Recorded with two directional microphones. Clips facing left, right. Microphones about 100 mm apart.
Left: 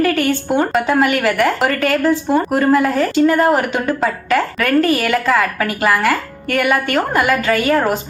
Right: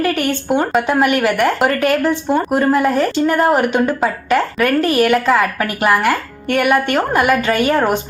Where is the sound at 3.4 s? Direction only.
15° right (ahead or behind).